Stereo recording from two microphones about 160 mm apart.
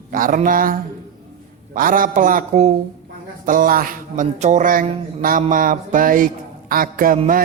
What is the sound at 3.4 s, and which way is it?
Speech, 60° right (ahead or behind).